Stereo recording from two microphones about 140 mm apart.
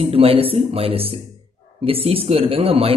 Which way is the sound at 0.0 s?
45° right (ahead or behind).